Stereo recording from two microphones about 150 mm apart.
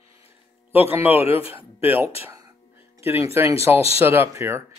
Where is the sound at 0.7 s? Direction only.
15° right (ahead or behind).